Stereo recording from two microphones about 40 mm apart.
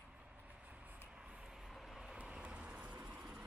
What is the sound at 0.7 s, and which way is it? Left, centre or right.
Vehicle, right.